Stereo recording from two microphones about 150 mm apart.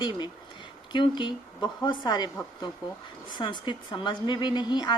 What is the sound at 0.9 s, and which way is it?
Speech, 30° left (ahead or behind).